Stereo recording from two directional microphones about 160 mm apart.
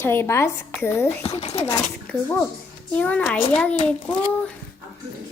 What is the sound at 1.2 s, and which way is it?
Speech, 40° left (ahead or behind).